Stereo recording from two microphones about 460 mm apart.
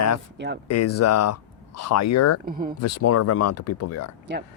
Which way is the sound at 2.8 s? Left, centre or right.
Left.